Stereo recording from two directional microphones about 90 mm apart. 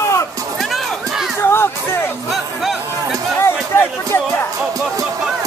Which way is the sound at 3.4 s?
30° left (ahead or behind).